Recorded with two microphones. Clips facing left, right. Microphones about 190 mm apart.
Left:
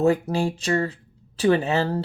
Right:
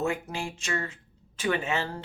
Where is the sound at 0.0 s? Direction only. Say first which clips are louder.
Left 10 dB; 35° left (ahead or behind).